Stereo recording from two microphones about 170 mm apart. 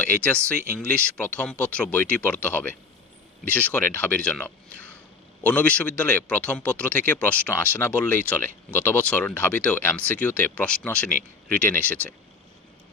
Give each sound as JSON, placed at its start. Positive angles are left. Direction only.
{"t": 0.0, "sound": "speech", "side_deg": 10}
{"t": 11.1, "sound": "speech", "side_deg": -60}